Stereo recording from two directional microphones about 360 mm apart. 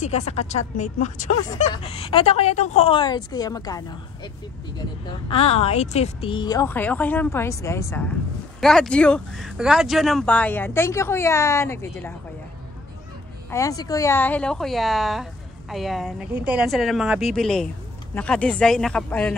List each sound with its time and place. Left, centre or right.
0.0 s speech: centre
13.5 s speech: centre